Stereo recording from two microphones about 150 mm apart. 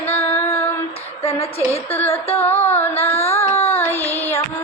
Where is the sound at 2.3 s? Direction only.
15° left (ahead or behind).